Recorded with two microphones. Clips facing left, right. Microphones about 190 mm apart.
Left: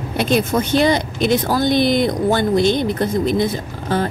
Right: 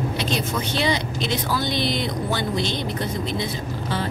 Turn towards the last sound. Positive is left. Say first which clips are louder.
# left 6 dB
turn(degrees=50)  # may be behind; listen again after turning